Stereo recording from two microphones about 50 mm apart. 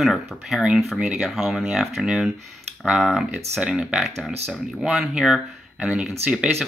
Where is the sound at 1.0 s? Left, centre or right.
Centre.